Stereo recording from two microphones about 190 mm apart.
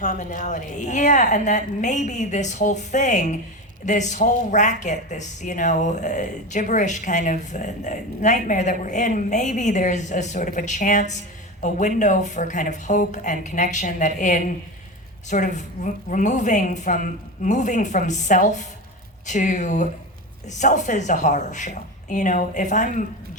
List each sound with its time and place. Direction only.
0.0 s speech: 40° left (ahead or behind)